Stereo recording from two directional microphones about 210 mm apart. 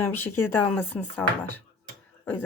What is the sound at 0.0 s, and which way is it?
Speech, 10° left (ahead or behind).